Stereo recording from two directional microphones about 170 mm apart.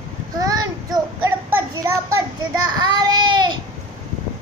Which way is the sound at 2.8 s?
25° right (ahead or behind).